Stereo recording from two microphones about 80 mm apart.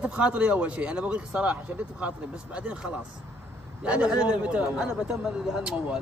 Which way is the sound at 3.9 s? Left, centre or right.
Centre.